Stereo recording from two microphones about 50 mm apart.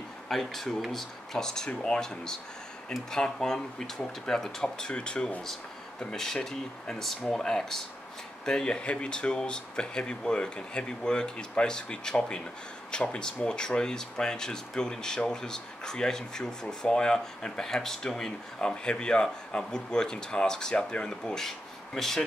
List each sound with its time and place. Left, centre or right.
0.3 s speech: centre
5.5 s speech: centre
21.5 s speech: centre